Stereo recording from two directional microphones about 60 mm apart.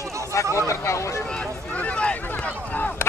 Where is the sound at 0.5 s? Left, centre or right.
Left.